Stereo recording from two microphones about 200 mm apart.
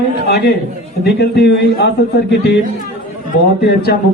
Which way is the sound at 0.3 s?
55° left (ahead or behind).